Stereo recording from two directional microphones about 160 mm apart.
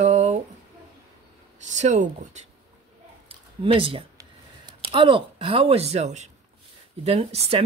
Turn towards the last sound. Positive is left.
turn(degrees=-40)  # may be behind; listen again after turning